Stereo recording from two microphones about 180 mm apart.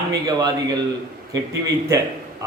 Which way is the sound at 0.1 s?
20° right (ahead or behind).